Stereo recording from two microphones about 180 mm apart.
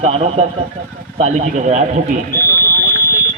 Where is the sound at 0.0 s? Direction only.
35° right (ahead or behind).